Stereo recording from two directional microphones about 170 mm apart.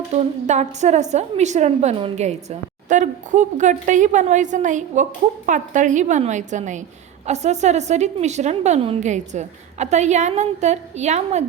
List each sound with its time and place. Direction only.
0.1 s a woman's voice: 45° right (ahead or behind)